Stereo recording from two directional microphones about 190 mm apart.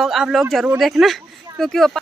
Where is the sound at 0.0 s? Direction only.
Centre (ahead or behind).